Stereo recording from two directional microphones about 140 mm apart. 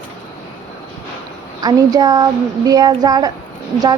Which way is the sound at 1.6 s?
25° right (ahead or behind).